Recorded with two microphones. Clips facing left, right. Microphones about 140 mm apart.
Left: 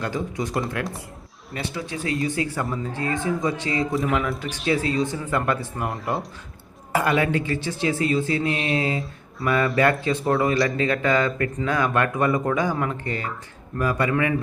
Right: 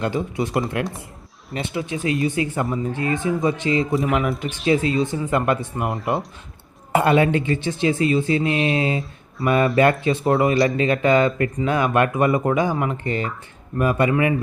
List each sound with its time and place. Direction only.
0.0 s speech: 20° right (ahead or behind)
3.8 s speech: centre (ahead or behind)
4.4 s speech: 20° right (ahead or behind)
6.9 s speech: 25° right (ahead or behind)